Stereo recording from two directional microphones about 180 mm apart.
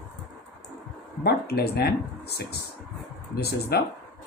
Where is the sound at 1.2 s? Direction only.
60° left (ahead or behind).